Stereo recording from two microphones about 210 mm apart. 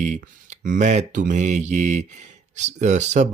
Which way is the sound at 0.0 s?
35° right (ahead or behind).